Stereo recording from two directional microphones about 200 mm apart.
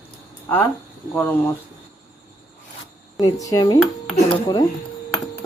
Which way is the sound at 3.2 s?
20° left (ahead or behind).